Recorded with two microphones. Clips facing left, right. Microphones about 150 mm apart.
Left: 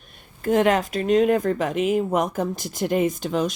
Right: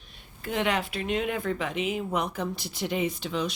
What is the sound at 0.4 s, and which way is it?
Speech, 45° left (ahead or behind).